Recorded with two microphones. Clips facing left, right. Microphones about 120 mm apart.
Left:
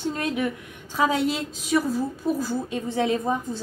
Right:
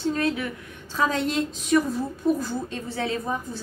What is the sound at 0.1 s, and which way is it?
A woman's voice, 20° left (ahead or behind).